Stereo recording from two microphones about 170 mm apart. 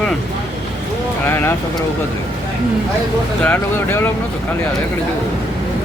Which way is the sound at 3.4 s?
10° left (ahead or behind).